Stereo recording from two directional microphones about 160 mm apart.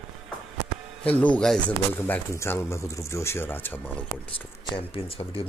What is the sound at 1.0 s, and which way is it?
Speech, 10° left (ahead or behind).